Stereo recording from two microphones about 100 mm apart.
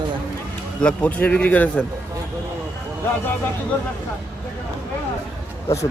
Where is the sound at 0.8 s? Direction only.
10° left (ahead or behind).